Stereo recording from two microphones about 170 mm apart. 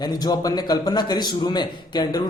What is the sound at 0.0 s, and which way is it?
A man's voice, 25° left (ahead or behind).